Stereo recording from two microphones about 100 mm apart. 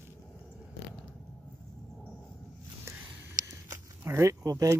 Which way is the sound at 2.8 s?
25° right (ahead or behind).